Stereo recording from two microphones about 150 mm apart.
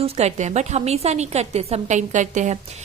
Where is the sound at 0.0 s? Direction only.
45° right (ahead or behind).